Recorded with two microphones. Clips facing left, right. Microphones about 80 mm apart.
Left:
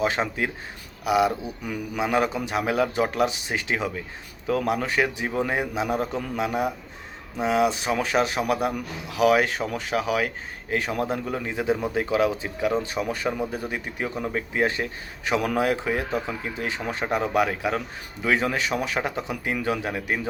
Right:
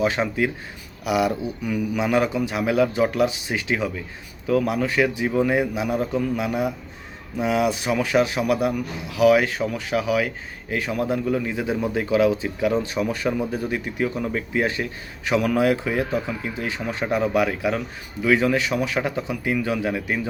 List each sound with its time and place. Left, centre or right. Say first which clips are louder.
0.0 s a man's voice: right 3 dB; left
19.3 s a man's voice: right 2 dB; left